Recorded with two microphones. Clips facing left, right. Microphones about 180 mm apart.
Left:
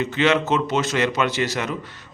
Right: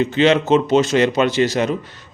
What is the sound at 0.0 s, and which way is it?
A man's voice, 30° right (ahead or behind).